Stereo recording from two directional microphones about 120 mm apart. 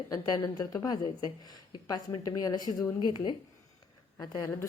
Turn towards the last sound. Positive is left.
turn(degrees=35)  # may be behind; listen again after turning